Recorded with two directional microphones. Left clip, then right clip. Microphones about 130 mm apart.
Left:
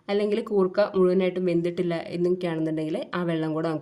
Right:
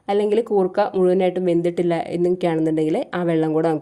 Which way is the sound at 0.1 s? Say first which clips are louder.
Right 6 dB; 35° right (ahead or behind).